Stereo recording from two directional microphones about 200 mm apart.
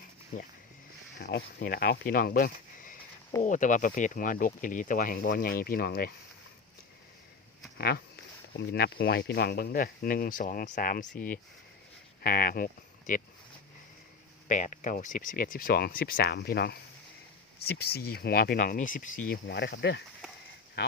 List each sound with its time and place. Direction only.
1.2 s speech: 50° left (ahead or behind)
7.8 s speech: 50° left (ahead or behind)
14.4 s speech: 40° left (ahead or behind)